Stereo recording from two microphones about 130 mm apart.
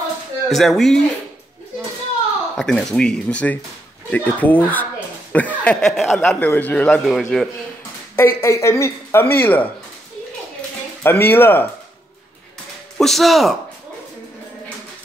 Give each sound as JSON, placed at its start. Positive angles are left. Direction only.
{"t": 0.5, "sound": "speech", "side_deg": 0}
{"t": 2.5, "sound": "a man's voice", "side_deg": 5}
{"t": 7.1, "sound": "speech", "side_deg": 0}
{"t": 8.2, "sound": "a man's voice", "side_deg": 20}
{"t": 11.0, "sound": "a man's voice", "side_deg": 15}
{"t": 12.9, "sound": "speech", "side_deg": 0}